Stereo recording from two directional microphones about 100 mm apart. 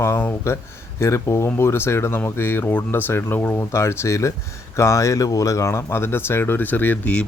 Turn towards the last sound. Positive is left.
turn(degrees=15)  # may be behind; listen again after turning